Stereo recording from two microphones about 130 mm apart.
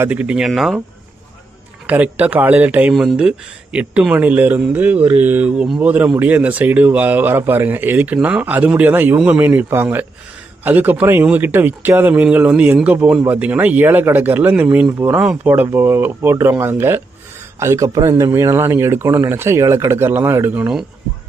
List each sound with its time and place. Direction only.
0.0 s speech: 10° right (ahead or behind)
1.9 s speech: 10° right (ahead or behind)